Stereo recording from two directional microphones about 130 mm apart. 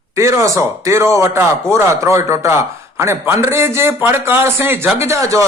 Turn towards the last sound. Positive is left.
turn(degrees=-20)  # may be behind; listen again after turning